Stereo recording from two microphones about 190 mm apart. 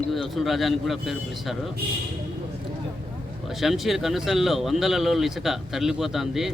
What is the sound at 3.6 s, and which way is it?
A man's voice, centre (ahead or behind).